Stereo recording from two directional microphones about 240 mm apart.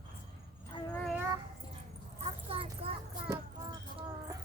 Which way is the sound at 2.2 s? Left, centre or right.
Right.